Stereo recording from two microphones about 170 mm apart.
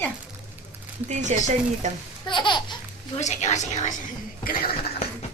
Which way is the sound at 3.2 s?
45° left (ahead or behind).